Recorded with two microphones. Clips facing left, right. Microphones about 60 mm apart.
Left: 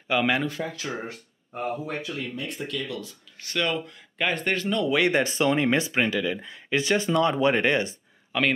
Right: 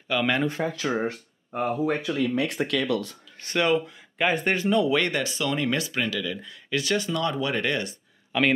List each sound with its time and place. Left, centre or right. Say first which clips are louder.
0.1 s speech: left 1 dB; centre
0.5 s speech: right 5 dB; right
2.0 s speech: right 8 dB; right
3.5 s speech: right 4 dB; centre
5.1 s speech: left 4 dB; left
8.3 s speech: right 2 dB; centre